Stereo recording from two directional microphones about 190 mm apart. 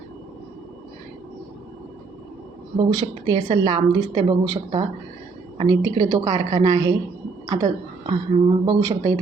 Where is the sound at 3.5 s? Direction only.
25° right (ahead or behind).